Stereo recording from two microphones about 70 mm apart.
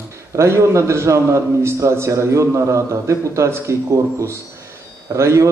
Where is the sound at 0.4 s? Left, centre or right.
Right.